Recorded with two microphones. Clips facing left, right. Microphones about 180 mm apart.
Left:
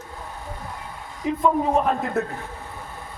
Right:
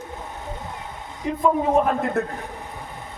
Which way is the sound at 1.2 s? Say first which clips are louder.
Even; centre (ahead or behind).